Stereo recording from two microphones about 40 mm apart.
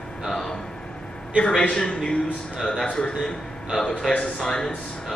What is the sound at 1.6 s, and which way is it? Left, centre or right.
Speech, left.